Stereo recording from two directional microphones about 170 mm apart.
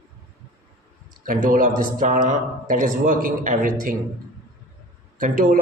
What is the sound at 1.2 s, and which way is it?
A man's voice, 50° right (ahead or behind).